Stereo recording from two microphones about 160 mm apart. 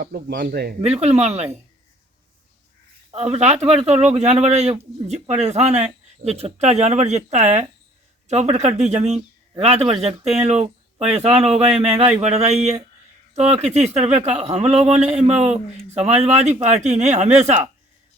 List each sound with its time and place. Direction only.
0.0 s speech: 70° right (ahead or behind)
0.8 s speech: 40° right (ahead or behind)
3.1 s speech: 40° right (ahead or behind)